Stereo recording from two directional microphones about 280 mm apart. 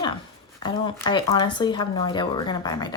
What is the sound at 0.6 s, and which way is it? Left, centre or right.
Speech, centre.